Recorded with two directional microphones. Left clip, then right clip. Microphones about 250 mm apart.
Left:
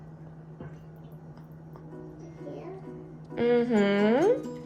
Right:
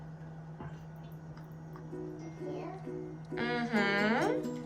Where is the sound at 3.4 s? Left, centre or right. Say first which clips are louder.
Left 9 dB; centre.